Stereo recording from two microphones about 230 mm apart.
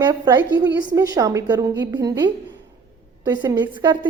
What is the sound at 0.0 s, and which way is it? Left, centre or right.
A woman's voice, centre.